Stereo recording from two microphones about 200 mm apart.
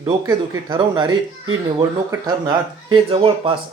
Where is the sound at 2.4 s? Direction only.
25° right (ahead or behind).